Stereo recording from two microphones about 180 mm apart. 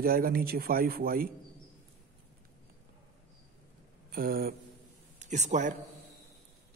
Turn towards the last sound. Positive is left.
turn(degrees=-40)  # may be behind; listen again after turning